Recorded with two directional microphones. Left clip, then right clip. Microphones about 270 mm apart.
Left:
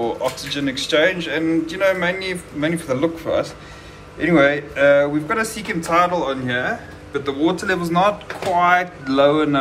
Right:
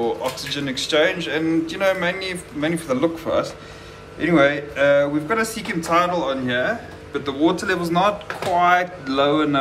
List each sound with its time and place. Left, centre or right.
0.0 s speech: centre